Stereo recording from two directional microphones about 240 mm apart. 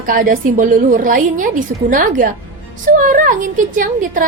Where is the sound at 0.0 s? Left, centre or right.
Right.